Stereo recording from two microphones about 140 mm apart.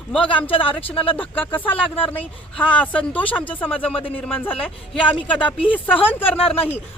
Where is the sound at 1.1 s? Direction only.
10° left (ahead or behind).